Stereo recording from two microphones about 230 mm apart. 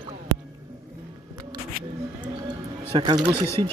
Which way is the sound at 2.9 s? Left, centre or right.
Centre.